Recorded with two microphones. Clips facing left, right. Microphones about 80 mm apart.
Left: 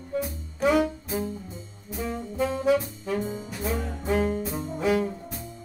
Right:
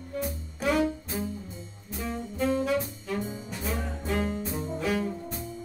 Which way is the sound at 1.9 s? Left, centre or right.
Centre.